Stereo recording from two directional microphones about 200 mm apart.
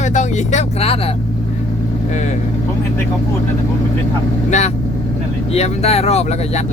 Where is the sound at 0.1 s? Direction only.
35° left (ahead or behind).